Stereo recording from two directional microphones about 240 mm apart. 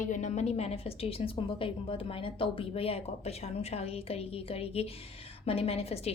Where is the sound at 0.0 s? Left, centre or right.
Left.